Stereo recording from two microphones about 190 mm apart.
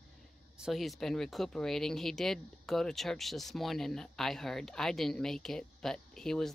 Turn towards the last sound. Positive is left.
turn(degrees=0)  # may be behind; listen again after turning